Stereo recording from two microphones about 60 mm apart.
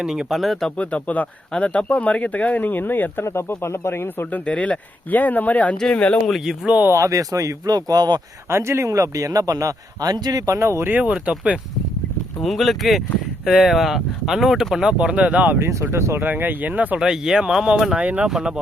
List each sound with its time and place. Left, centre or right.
0.0 s speech: centre
0.3 s speech: centre
0.8 s speech: left
4.3 s speech: left
6.9 s a man's voice: right
8.4 s a man's voice: right
10.6 s speech: right
10.9 s speech: right
12.4 s speech: centre; by 15.5 s right
15.7 s speech: right
16.2 s speech: right
17.0 s speech: centre
18.0 s speech: right
18.3 s speech: centre